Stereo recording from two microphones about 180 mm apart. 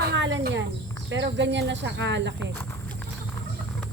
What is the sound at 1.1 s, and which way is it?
Speech, 80° right.